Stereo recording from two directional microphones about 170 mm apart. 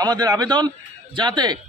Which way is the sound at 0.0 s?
20° right (ahead or behind).